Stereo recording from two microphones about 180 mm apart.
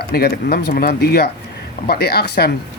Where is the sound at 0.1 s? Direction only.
60° left (ahead or behind).